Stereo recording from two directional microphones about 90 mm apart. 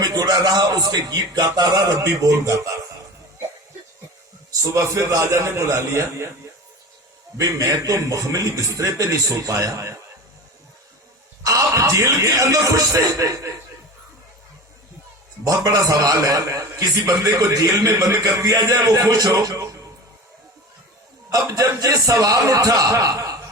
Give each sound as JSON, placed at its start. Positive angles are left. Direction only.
{"t": 0.0, "sound": "speech", "side_deg": -45}
{"t": 4.6, "sound": "a man's voice", "side_deg": -35}
{"t": 7.3, "sound": "a man's voice", "side_deg": -40}
{"t": 11.4, "sound": "a man's voice", "side_deg": -35}
{"t": 15.4, "sound": "a man's voice", "side_deg": -40}
{"t": 21.4, "sound": "a man's voice", "side_deg": -40}